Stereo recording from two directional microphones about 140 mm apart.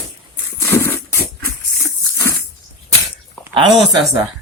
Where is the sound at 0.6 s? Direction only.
20° left (ahead or behind).